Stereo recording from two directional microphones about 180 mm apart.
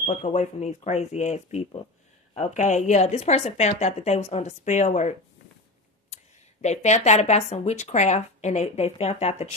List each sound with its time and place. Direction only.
0.0 s speech: 40° left (ahead or behind)
6.1 s speech: 40° left (ahead or behind)